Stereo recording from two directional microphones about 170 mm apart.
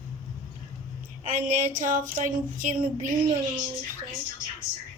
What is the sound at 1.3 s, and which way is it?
Child singing, 45° right (ahead or behind).